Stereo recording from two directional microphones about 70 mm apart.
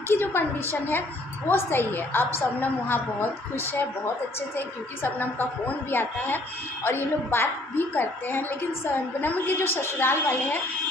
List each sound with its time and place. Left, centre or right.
0.1 s a woman's voice: left